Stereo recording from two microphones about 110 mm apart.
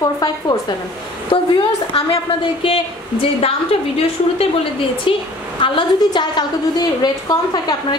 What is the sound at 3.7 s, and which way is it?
Speech, 60° left (ahead or behind).